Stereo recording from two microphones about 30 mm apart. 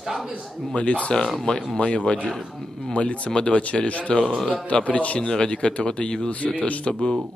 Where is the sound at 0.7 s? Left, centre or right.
Left.